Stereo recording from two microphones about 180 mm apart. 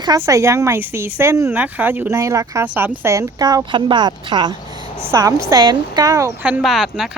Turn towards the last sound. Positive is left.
turn(degrees=0)  # may be behind; listen again after turning